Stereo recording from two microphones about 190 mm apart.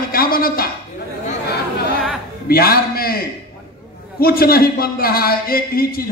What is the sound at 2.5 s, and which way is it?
A man's voice, 50° left (ahead or behind).